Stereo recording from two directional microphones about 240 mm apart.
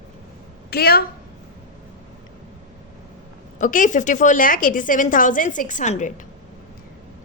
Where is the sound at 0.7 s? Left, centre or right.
Left.